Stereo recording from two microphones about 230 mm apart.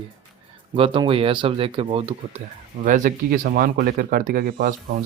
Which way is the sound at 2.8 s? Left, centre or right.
Right.